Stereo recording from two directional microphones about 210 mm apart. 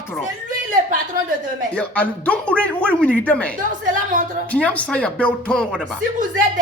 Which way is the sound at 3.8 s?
40° right (ahead or behind).